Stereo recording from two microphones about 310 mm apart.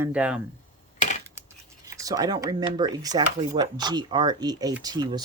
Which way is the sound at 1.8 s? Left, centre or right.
Centre.